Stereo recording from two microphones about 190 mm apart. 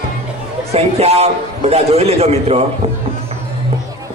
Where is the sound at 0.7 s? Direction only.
35° right (ahead or behind).